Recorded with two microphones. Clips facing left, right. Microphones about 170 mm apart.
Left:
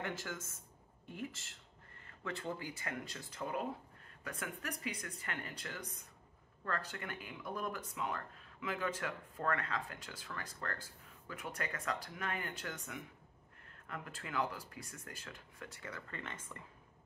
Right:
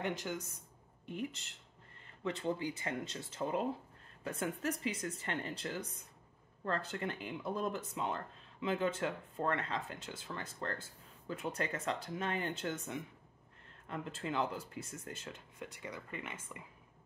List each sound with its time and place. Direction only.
0.0 s speech: 20° right (ahead or behind)